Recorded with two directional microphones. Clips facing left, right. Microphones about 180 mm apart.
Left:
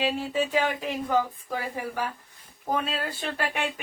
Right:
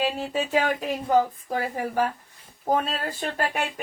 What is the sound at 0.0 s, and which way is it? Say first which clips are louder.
Speech: even; 45° right (ahead or behind).